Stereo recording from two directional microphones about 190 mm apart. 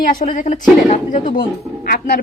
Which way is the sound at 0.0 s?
45° left (ahead or behind).